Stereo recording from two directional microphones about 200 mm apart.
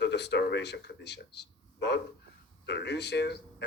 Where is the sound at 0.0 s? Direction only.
60° left (ahead or behind).